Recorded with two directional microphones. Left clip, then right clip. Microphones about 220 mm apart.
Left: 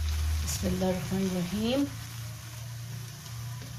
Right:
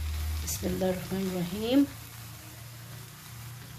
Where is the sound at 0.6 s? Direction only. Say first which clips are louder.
Right 1 dB; 45° right (ahead or behind).